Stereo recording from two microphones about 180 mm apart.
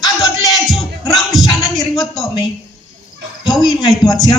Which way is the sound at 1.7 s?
Centre (ahead or behind).